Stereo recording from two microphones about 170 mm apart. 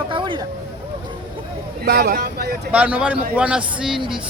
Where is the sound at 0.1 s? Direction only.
30° right (ahead or behind).